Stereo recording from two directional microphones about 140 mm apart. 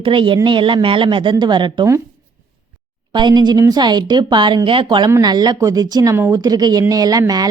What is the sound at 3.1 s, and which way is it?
Speech, 35° right (ahead or behind).